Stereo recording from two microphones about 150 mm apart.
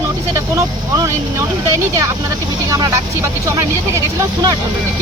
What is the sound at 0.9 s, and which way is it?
Speech, 20° right (ahead or behind).